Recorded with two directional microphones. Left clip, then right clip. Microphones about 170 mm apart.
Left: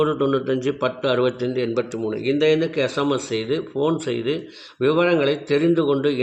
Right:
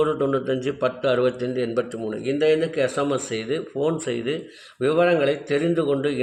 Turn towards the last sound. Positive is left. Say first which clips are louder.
# left 3 dB
turn(degrees=20)  # may be behind; listen again after turning